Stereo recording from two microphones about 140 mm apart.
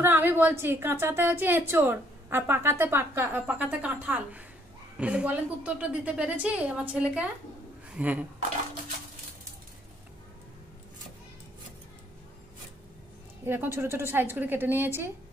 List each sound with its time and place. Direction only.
0.0 s a woman's voice: 15° right (ahead or behind)
13.5 s a woman's voice: 15° right (ahead or behind)